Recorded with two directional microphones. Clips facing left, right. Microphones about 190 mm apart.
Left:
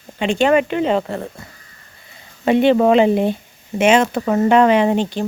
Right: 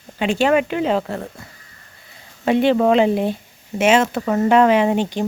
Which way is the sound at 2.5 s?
Centre (ahead or behind).